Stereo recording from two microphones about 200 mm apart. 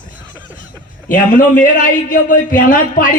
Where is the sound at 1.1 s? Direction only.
40° left (ahead or behind).